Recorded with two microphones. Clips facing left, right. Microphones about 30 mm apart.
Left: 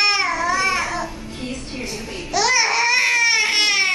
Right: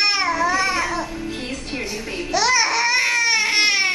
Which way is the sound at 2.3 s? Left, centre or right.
Centre.